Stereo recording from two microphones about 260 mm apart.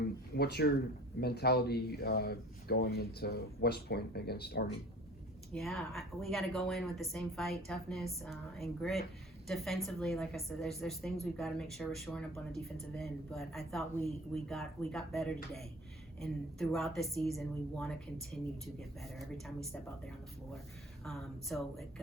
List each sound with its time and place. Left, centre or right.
0.3 s speech: left
5.5 s a woman's voice: centre
21.0 s a woman's voice: centre